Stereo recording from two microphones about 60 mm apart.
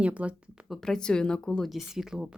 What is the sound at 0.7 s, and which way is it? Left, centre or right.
Speech, centre.